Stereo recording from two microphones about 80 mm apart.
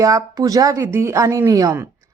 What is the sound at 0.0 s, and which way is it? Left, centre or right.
Speech, right.